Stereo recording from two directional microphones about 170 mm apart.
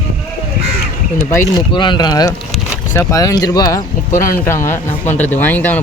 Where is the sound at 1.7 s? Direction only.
25° left (ahead or behind); by 5.8 s 10° left (ahead or behind).